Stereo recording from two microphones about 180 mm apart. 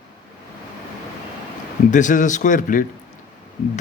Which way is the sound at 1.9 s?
45° left (ahead or behind).